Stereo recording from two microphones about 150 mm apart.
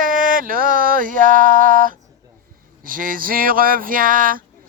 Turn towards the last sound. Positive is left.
turn(degrees=-65)  # may be behind; listen again after turning